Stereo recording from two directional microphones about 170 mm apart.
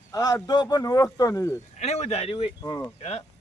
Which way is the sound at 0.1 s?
20° left (ahead or behind).